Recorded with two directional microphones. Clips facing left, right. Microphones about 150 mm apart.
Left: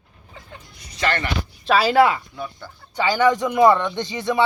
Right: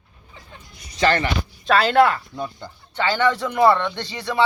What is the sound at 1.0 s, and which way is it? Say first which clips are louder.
Speech: right 4 dB; 30° right (ahead or behind).